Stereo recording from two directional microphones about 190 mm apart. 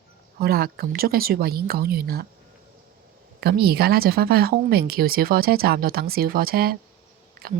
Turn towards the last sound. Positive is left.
turn(degrees=-55)  # may be behind; listen again after turning